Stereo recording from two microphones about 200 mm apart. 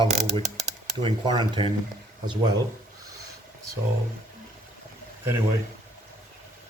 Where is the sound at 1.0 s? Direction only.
20° right (ahead or behind).